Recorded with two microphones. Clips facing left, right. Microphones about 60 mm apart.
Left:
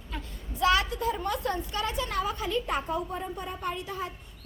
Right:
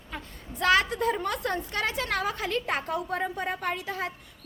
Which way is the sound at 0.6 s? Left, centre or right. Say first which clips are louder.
Right 2 dB; right.